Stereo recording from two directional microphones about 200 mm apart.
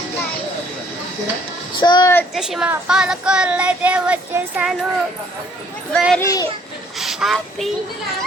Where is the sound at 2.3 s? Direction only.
Centre (ahead or behind).